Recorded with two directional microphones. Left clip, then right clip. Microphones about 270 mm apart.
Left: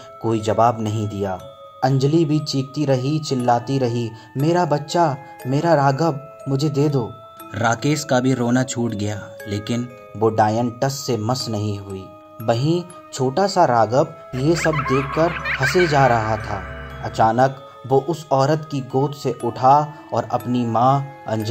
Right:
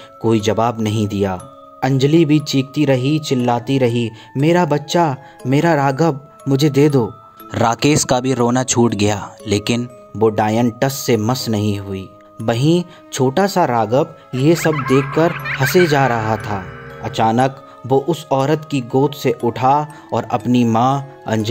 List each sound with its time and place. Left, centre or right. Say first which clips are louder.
0.2 s speech: right 1 dB; right
14.7 s speech: right 4 dB; centre
15.6 s speech: right 2 dB; right